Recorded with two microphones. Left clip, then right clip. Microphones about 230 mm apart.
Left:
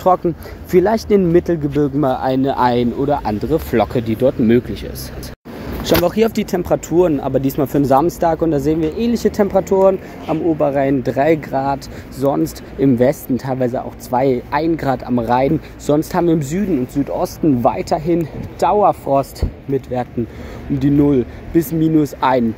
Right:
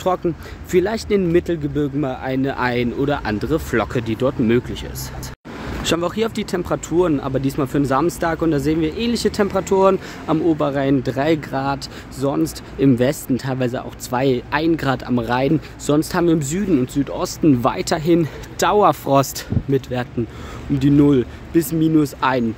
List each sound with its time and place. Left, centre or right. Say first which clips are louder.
0.2 s speech: left 3 dB; centre
2.0 s speech: left 6 dB; left
3.3 s speech: left 3 dB; centre
5.9 s speech: left 6 dB; centre
17.1 s speech: left 1 dB; right
17.6 s speech: left 2 dB; centre
19.7 s speech: left 2 dB; centre